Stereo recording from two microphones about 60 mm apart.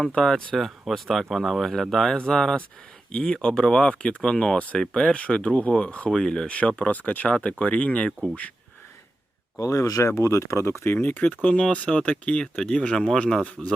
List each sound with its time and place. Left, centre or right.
0.0 s speech: centre
6.1 s speech: centre
6.5 s speech: left
9.6 s speech: left
10.8 s speech: left
11.4 s speech: centre